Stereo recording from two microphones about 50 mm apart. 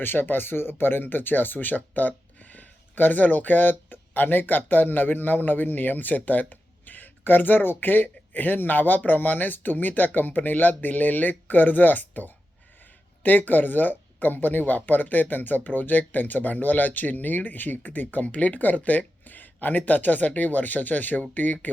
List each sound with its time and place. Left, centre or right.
0.0 s speech: left